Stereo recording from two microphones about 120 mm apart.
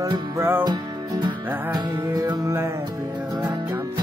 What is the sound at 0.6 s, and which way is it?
Music, 35° right (ahead or behind).